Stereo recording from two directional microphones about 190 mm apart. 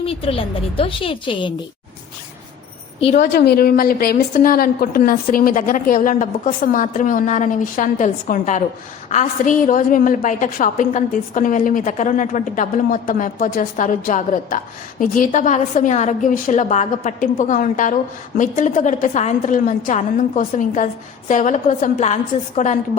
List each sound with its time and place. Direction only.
0.0 s a woman's voice: 30° left (ahead or behind)
3.0 s a woman's voice: 35° left (ahead or behind)
3.2 s a woman's voice: 55° left (ahead or behind); by 22.8 s 40° left (ahead or behind)